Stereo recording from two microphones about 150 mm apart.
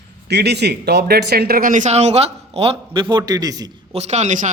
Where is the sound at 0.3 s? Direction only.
90° right; by 3.7 s 25° right (ahead or behind).